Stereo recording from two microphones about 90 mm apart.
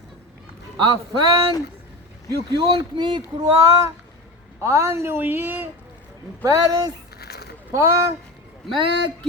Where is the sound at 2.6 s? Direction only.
70° right (ahead or behind).